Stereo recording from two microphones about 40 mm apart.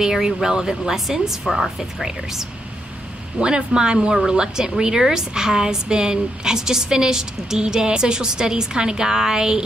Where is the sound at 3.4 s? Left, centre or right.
Right.